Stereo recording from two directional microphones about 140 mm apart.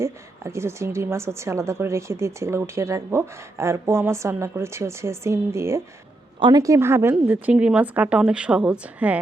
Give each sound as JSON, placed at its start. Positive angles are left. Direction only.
{"t": 0.0, "sound": "a woman's voice", "side_deg": -20}